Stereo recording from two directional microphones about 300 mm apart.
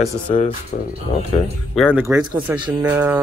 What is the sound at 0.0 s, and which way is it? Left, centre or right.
Speech, left.